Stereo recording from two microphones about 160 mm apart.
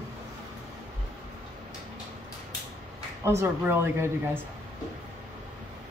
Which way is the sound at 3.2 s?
15° right (ahead or behind).